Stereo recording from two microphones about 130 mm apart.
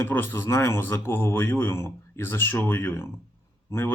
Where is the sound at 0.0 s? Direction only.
15° left (ahead or behind).